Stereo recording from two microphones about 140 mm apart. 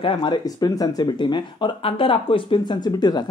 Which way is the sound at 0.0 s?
35° left (ahead or behind).